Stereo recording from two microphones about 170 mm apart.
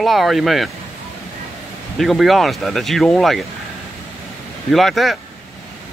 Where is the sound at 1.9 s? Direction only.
Centre (ahead or behind).